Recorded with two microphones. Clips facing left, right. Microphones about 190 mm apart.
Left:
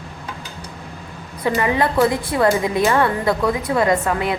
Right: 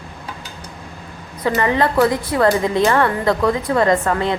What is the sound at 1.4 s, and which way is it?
A woman's voice, 15° left (ahead or behind).